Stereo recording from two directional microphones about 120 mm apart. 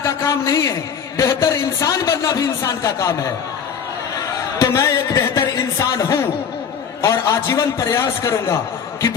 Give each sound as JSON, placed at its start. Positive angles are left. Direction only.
{"t": 0.0, "sound": "a man's voice", "side_deg": 25}
{"t": 4.6, "sound": "a sound", "side_deg": 25}
{"t": 7.0, "sound": "a man's voice", "side_deg": 25}